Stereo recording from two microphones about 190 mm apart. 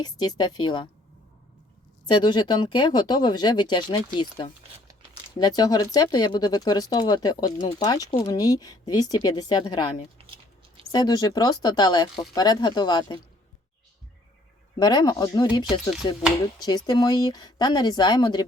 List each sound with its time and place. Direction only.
0.0 s speech: 20° left (ahead or behind)
2.0 s speech: 25° left (ahead or behind)
10.9 s speech: 20° left (ahead or behind)
14.8 s speech: 20° left (ahead or behind)